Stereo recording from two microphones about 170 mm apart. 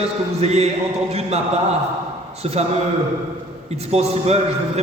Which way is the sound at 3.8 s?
35° right (ahead or behind).